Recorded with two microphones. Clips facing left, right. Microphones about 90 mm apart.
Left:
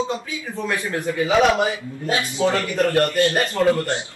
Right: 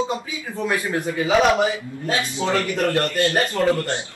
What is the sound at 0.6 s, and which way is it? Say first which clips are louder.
Speech: right 2 dB; 15° right (ahead or behind).